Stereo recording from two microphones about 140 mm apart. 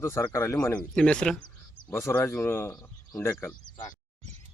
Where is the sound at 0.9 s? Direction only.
5° left (ahead or behind).